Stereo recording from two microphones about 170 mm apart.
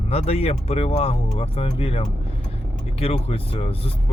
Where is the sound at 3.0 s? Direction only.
35° left (ahead or behind).